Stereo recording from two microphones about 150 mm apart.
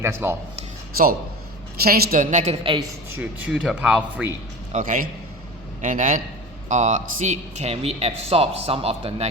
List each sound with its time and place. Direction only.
0.0 s speech: 15° right (ahead or behind)
1.8 s a woman's voice: 85° right; by 2.6 s 55° right (ahead or behind)
3.1 s speech: 10° right (ahead or behind)
4.7 s a woman's voice: 55° right (ahead or behind); by 9.2 s 40° right (ahead or behind)